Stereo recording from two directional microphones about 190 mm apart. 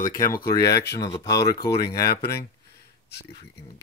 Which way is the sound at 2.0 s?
55° left (ahead or behind).